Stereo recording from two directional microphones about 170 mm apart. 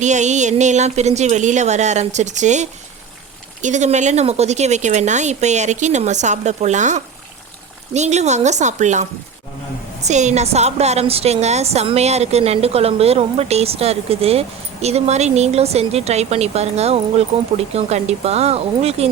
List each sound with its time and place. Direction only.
0.0 s a woman's voice: 45° right (ahead or behind)